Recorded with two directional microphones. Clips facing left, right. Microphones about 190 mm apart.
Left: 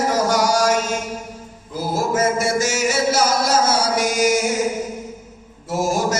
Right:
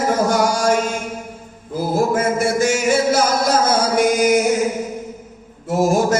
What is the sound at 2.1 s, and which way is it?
Chant, 55° right (ahead or behind).